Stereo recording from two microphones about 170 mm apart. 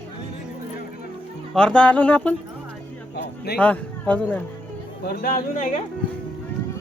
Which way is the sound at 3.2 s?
70° left (ahead or behind).